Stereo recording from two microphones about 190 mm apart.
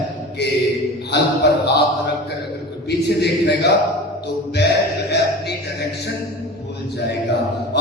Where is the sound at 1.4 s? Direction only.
60° left (ahead or behind).